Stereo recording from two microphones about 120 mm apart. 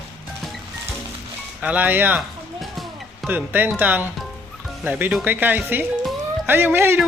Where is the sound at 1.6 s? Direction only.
10° right (ahead or behind).